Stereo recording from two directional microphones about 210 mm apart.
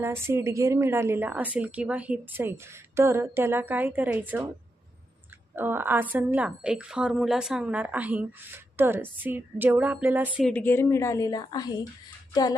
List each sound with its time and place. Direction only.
0.0 s a woman's voice: 10° right (ahead or behind)
5.5 s a woman's voice: 10° right (ahead or behind)
10.5 s a woman's voice: 10° left (ahead or behind)